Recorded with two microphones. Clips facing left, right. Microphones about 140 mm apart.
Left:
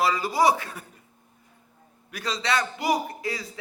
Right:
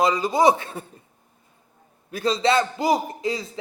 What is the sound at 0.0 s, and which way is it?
A man's voice, 20° right (ahead or behind).